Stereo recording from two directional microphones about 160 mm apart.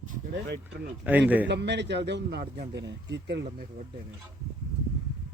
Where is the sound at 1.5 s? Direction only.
90° right.